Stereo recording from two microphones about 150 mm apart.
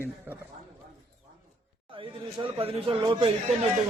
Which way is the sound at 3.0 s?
30° right (ahead or behind).